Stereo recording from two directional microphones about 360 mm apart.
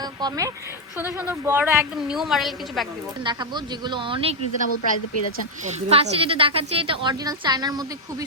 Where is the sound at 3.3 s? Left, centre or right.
Centre.